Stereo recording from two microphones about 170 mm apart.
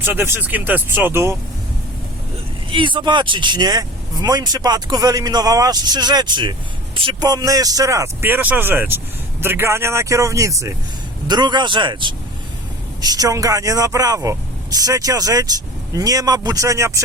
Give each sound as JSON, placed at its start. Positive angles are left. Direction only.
{"t": 0.0, "sound": "speech", "side_deg": -15}
{"t": 2.6, "sound": "speech", "side_deg": -30}